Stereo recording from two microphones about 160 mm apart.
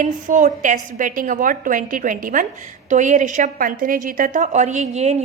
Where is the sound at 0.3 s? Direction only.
55° right (ahead or behind).